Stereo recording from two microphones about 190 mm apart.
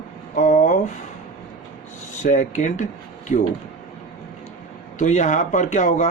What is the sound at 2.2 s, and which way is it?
Speech, 40° left (ahead or behind).